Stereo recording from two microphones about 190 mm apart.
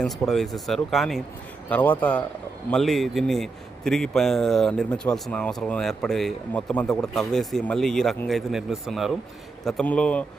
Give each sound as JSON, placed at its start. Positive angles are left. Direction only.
{"t": 0.0, "sound": "speech", "side_deg": 0}